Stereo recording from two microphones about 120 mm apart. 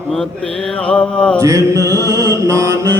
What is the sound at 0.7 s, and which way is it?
Mantra, 10° left (ahead or behind).